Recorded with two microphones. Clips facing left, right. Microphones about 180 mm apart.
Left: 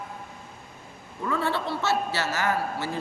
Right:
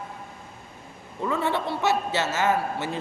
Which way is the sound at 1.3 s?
20° right (ahead or behind).